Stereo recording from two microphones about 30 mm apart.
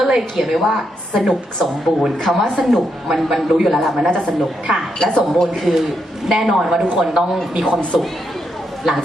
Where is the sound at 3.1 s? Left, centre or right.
Centre.